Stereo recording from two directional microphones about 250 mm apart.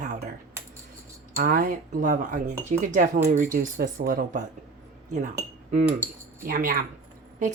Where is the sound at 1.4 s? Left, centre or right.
Right.